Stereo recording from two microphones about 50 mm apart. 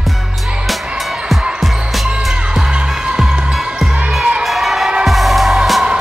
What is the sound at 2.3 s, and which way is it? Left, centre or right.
Music, centre.